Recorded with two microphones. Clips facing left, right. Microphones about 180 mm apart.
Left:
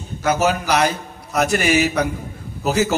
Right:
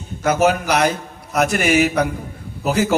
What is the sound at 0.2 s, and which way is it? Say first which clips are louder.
A man's voice: right 2 dB; 55° right (ahead or behind).